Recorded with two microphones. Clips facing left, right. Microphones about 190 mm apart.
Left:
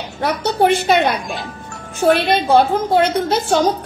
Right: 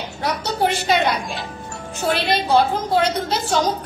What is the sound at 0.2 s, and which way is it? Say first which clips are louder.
A woman's voice: left 5 dB; 55° left (ahead or behind).